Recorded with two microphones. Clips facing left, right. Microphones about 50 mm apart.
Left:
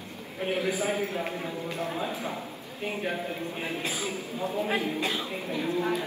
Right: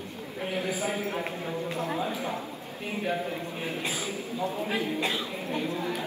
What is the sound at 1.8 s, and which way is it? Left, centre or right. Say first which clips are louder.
Speech: even; right.